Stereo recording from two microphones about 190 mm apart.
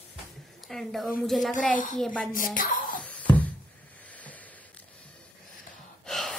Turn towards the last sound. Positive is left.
turn(degrees=0)  # may be behind; listen again after turning